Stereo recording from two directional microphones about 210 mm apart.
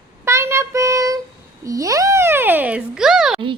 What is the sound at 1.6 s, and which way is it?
A woman's voice, 15° right (ahead or behind).